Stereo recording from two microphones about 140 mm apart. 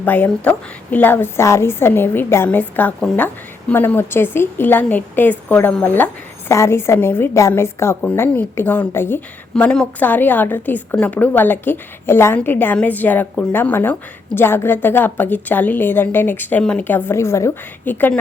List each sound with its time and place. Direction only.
0.0 s a woman's voice: 15° left (ahead or behind)